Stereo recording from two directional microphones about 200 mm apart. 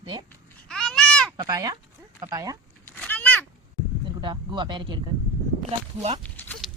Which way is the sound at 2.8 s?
10° left (ahead or behind).